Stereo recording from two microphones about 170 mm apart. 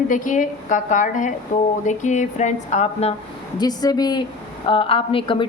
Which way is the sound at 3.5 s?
25° left (ahead or behind).